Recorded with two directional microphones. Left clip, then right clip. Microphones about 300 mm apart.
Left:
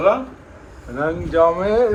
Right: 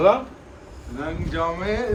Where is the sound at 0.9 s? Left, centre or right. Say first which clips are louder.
Left 10 dB; centre.